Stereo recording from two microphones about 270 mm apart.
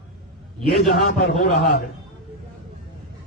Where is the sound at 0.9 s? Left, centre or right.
Left.